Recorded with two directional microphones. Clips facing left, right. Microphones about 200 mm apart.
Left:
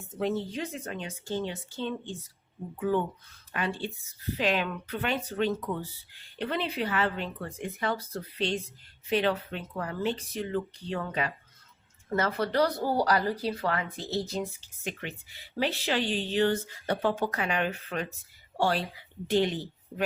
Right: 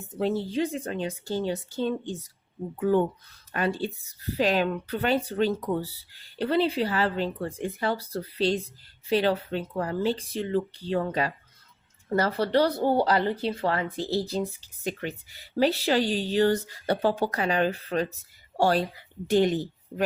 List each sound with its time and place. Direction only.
0.2 s speech: 30° right (ahead or behind)